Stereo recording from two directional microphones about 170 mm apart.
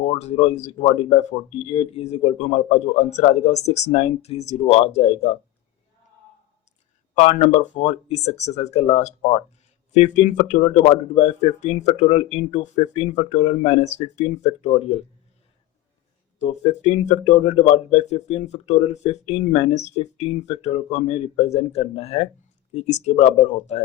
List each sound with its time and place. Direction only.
0.1 s speech: 40° left (ahead or behind)
7.2 s speech: 40° left (ahead or behind)
16.4 s speech: 40° left (ahead or behind)